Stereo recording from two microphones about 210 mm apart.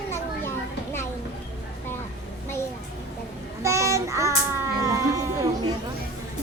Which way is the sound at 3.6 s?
15° right (ahead or behind).